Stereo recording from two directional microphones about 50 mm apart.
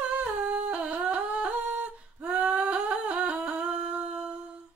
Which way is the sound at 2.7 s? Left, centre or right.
Right.